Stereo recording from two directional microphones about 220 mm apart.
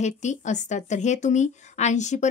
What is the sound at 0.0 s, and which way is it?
Speech, 30° left (ahead or behind).